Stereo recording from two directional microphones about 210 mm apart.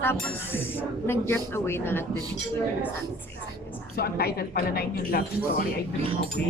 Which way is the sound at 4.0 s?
50° left (ahead or behind).